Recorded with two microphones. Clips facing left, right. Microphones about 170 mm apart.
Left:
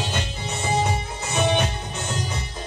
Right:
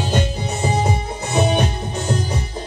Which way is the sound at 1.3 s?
35° right (ahead or behind).